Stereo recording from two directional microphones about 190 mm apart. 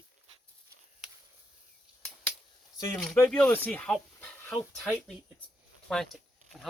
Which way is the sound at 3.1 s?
5° left (ahead or behind).